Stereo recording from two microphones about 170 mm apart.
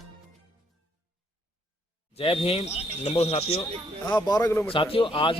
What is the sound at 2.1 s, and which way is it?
Speech, 30° left (ahead or behind).